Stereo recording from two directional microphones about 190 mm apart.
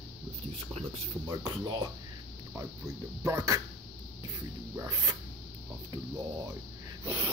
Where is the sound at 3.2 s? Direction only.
15° right (ahead or behind).